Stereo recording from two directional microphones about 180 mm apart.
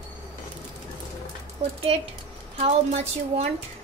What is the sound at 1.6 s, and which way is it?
Speech, 35° right (ahead or behind).